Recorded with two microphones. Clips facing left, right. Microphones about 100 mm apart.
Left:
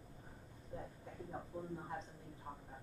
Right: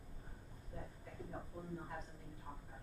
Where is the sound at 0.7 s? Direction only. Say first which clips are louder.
Left 3 dB; 30° left (ahead or behind).